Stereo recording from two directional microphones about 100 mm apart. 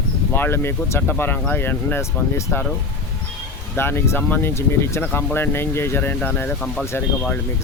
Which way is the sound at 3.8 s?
25° left (ahead or behind).